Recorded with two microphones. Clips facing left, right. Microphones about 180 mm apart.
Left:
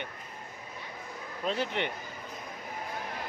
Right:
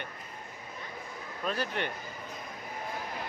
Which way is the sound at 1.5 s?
20° left (ahead or behind).